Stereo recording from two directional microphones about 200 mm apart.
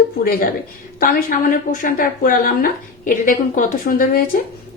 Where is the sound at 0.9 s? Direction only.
45° left (ahead or behind).